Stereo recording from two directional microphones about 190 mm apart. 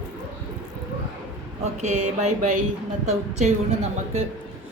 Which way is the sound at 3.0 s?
35° right (ahead or behind).